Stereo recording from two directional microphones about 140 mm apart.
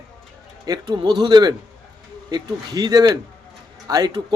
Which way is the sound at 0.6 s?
30° right (ahead or behind).